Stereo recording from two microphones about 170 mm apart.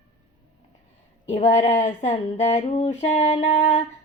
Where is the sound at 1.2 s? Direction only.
40° left (ahead or behind).